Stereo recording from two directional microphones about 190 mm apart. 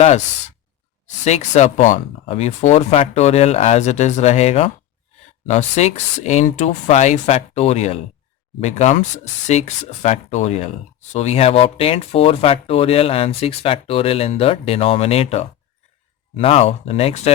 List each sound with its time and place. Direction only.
1.0 s speech: 35° left (ahead or behind)